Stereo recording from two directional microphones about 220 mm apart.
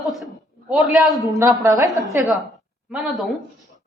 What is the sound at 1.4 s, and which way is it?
Speech, 15° right (ahead or behind).